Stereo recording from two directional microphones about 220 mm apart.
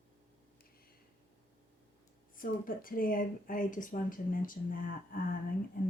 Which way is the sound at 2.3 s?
40° left (ahead or behind).